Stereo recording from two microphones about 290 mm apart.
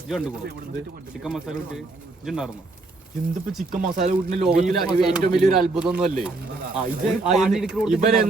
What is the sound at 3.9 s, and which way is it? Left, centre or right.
Speech, right.